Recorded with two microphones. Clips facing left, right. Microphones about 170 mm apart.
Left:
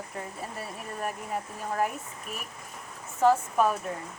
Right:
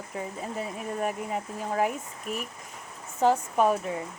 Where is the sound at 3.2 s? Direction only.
20° right (ahead or behind).